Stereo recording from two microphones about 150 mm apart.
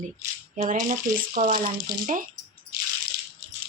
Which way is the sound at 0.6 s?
55° right (ahead or behind).